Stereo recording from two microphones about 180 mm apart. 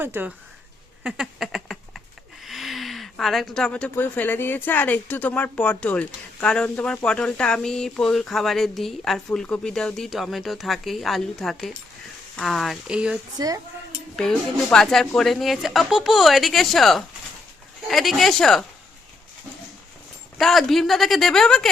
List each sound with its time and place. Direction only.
0.0 s speech: 10° right (ahead or behind)
1.0 s a sound: 5° right (ahead or behind)
2.4 s speech: centre (ahead or behind)
13.3 s speech: 20° right (ahead or behind)
14.2 s speech: 5° left (ahead or behind)
20.4 s speech: centre (ahead or behind)